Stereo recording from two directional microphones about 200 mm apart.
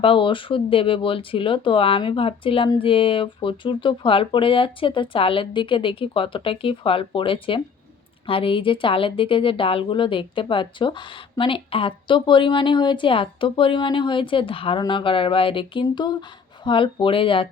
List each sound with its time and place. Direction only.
0.0 s a woman's voice: 25° left (ahead or behind)